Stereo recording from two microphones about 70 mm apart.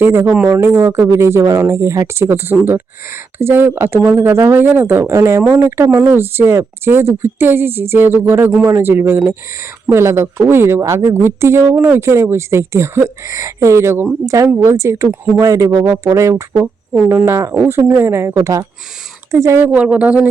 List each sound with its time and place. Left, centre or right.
0.0 s speech: right
16.1 s speech: right
19.7 s speech: centre